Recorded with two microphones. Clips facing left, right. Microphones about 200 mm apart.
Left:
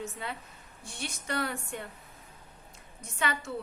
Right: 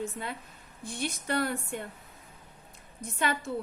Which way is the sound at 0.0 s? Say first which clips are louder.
Right 3 dB; 50° right (ahead or behind).